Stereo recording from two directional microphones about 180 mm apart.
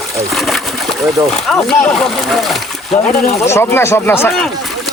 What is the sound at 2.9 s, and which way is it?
Speech, 35° left (ahead or behind).